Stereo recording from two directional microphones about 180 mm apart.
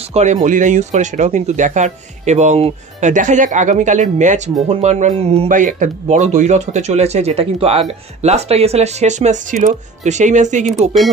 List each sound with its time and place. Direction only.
0.1 s speech: 40° right (ahead or behind)
5.5 s speech: 45° right (ahead or behind)